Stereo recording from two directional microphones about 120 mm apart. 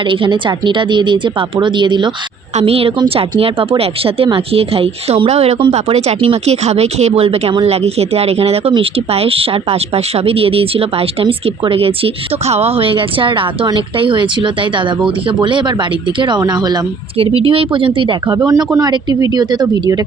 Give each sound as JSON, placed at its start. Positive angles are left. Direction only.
{"t": 0.1, "sound": "speech", "side_deg": -45}
{"t": 2.6, "sound": "speech", "side_deg": -55}
{"t": 17.2, "sound": "speech", "side_deg": -50}
{"t": 18.3, "sound": "speech", "side_deg": -25}